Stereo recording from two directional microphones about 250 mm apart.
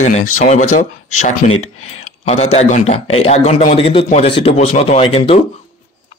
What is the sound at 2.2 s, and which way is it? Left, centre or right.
A man's voice, left.